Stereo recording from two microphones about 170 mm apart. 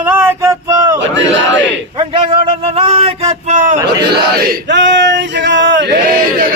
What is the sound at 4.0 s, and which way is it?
Speech, 70° right (ahead or behind).